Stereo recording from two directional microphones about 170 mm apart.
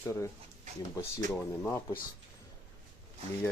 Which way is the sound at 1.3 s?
15° left (ahead or behind).